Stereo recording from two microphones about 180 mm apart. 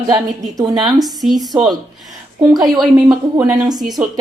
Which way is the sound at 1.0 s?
Centre (ahead or behind).